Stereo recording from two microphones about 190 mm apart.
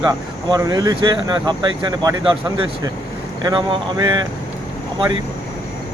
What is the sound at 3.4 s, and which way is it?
Speech, 20° right (ahead or behind).